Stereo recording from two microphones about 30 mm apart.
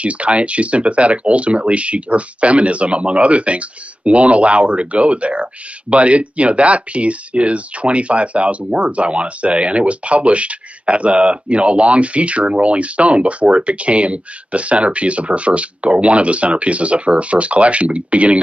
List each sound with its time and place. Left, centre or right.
0.0 s speech: right